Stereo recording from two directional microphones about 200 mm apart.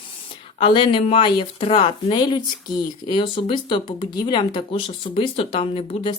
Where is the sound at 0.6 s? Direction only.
25° left (ahead or behind).